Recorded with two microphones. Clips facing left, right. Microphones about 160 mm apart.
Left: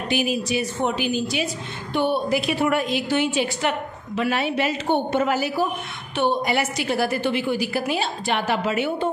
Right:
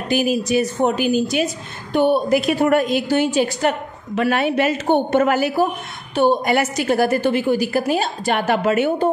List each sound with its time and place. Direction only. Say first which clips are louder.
0.1 s a woman's voice: right 6 dB; 45° right (ahead or behind)